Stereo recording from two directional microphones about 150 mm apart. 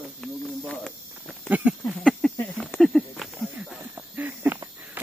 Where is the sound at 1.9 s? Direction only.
5° left (ahead or behind).